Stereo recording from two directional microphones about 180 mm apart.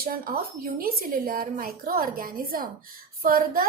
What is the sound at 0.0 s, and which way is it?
A woman's voice, 55° right (ahead or behind).